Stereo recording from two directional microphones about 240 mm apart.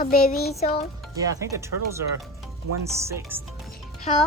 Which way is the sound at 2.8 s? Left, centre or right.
Centre.